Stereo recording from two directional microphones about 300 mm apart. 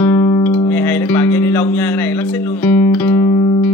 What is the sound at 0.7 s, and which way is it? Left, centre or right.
Music, centre.